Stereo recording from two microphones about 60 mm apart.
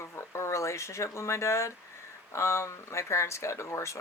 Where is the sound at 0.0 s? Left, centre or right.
Left.